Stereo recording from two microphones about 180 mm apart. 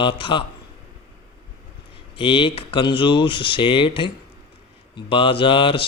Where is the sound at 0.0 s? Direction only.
30° left (ahead or behind).